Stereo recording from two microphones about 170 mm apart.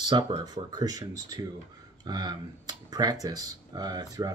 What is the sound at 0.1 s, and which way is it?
Speech, 25° right (ahead or behind).